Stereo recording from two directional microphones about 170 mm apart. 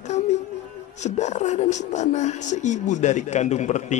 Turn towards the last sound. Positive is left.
turn(degrees=45)  # may be behind; listen again after turning